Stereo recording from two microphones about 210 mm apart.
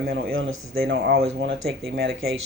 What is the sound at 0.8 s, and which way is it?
Speech, 50° right (ahead or behind).